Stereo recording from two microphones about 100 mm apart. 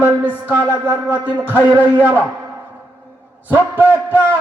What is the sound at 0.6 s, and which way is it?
Music, 20° left (ahead or behind).